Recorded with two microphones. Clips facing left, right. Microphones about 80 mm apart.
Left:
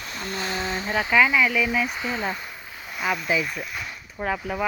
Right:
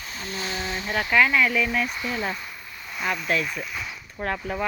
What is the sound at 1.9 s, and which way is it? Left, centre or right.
Speech, left.